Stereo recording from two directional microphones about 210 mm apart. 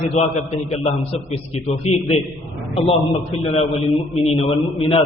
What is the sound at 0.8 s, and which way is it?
Speech, 30° left (ahead or behind).